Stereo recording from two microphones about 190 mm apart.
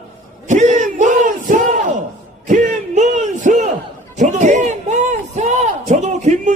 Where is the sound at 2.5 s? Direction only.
40° right (ahead or behind).